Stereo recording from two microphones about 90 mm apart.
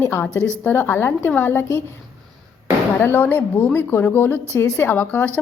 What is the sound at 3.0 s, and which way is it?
A woman's voice, 20° left (ahead or behind).